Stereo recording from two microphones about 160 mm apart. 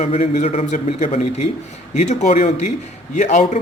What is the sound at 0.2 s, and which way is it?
Speech, 45° left (ahead or behind).